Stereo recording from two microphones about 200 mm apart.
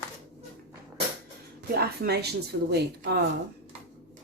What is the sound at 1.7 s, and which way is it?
Speech, 55° right (ahead or behind).